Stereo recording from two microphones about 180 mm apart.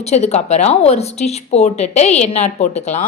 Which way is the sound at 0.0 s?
35° left (ahead or behind).